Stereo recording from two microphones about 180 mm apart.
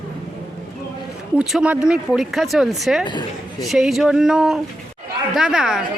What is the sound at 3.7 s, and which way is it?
A woman's voice, centre (ahead or behind).